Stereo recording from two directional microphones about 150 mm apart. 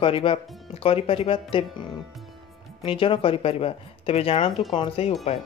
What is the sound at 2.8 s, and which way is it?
Speech, 35° left (ahead or behind).